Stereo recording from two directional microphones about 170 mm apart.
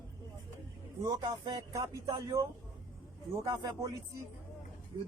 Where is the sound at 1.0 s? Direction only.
25° right (ahead or behind).